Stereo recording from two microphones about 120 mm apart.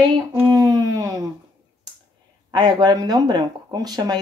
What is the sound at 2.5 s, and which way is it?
A woman's voice, 40° right (ahead or behind).